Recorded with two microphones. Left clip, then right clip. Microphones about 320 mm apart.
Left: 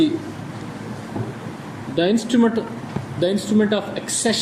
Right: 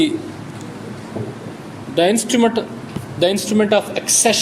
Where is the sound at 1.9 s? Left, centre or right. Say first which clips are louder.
Right 4 dB; centre.